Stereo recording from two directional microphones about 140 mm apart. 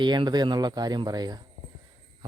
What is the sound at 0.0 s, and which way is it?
Speech, 30° right (ahead or behind).